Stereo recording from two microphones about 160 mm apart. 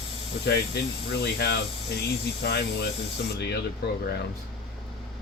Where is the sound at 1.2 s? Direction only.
90° left.